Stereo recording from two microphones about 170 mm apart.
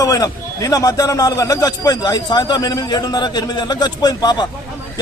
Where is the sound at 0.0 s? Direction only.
20° left (ahead or behind).